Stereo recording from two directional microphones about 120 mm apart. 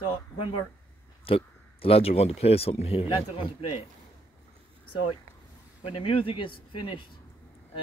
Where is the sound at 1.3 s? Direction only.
50° left (ahead or behind).